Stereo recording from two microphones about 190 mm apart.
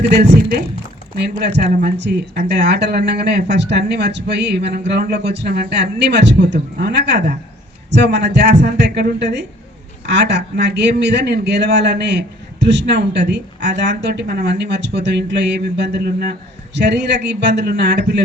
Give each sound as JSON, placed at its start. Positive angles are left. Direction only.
{"t": 0.1, "sound": "a man's voice", "side_deg": -50}
{"t": 2.0, "sound": "a man's voice", "side_deg": -55}